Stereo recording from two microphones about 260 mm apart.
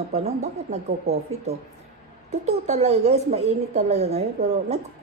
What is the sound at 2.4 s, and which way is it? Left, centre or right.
A woman's voice, right.